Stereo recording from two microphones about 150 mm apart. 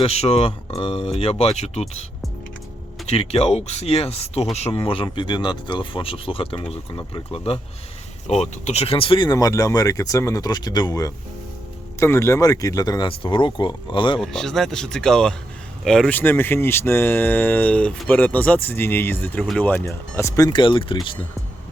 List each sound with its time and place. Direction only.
0.0 s speech: 40° left (ahead or behind)
3.1 s speech: 40° left (ahead or behind)
14.2 s speech: 5° left (ahead or behind); by 21.2 s 35° left (ahead or behind)